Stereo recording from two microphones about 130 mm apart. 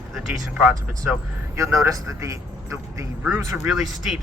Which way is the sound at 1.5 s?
25° right (ahead or behind).